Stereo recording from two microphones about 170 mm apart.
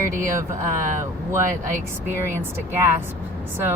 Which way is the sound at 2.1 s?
15° right (ahead or behind).